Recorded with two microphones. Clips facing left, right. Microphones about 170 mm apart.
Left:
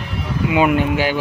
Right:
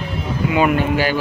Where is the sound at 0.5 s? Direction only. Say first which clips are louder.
Left 1 dB; 15° left (ahead or behind).